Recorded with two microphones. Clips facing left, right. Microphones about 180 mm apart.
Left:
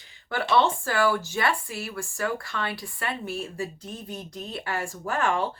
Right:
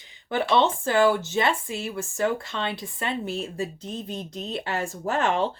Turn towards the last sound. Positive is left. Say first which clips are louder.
# right 2 dB
turn(degrees=-20)  # may be behind; listen again after turning